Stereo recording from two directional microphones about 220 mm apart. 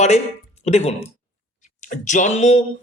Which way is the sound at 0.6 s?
30° left (ahead or behind).